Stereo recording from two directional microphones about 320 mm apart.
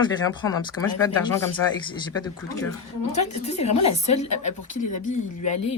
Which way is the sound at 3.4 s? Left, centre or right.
Centre.